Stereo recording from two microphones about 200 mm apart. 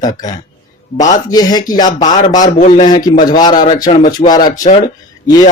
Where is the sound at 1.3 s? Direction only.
20° left (ahead or behind).